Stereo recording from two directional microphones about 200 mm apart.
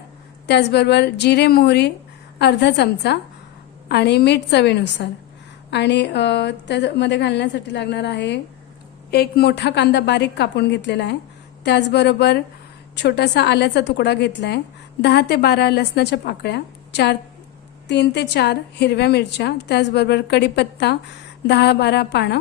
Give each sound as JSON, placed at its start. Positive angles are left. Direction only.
{"t": 0.4, "sound": "a woman's voice", "side_deg": 55}